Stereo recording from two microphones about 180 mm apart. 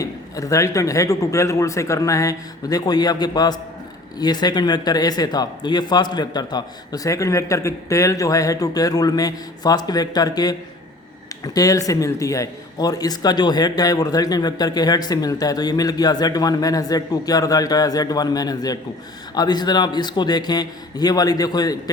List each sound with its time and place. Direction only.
0.0 s a man's voice: 20° left (ahead or behind)